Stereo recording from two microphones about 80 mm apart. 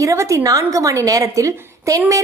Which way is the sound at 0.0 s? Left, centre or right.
Right.